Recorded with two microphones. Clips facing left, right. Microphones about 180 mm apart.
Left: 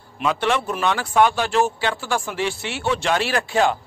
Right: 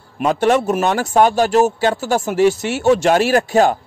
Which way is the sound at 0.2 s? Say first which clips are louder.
Right 6 dB; 45° right (ahead or behind).